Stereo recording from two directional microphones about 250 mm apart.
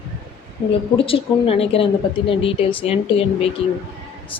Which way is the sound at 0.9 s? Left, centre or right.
Left.